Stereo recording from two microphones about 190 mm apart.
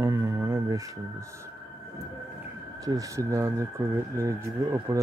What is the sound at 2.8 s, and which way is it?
Speech, 20° right (ahead or behind).